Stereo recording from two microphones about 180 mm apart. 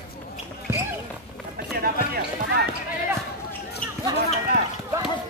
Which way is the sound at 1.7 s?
60° right (ahead or behind).